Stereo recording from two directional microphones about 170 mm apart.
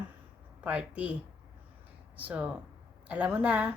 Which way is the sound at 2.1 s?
10° right (ahead or behind).